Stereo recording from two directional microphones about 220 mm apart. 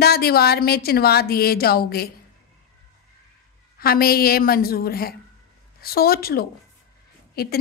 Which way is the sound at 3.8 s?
45° left (ahead or behind).